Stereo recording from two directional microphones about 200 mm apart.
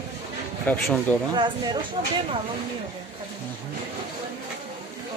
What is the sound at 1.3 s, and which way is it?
Speech, 25° right (ahead or behind).